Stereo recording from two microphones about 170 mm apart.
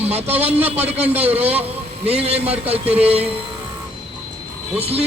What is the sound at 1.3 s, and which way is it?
A man's voice, 35° right (ahead or behind).